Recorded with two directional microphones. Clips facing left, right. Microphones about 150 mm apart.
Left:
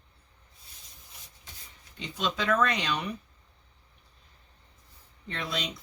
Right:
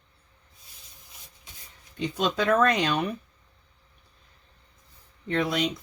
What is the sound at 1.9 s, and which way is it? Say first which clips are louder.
Speech: right 6 dB; 50° right (ahead or behind).